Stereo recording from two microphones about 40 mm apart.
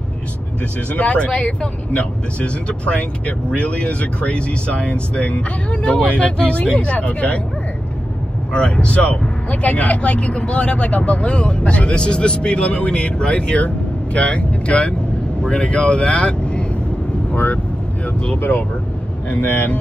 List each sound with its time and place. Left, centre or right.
0.9 s speech: left
1.2 s speech: left
8.5 s speech: left
19.4 s speech: left